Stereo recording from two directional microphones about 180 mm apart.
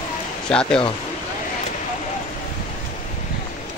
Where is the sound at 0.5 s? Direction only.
5° left (ahead or behind).